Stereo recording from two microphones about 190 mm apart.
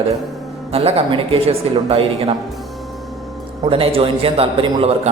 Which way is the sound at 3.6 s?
30° right (ahead or behind).